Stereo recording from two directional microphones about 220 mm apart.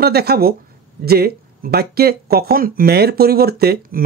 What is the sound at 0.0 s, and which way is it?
Speech, 45° right (ahead or behind).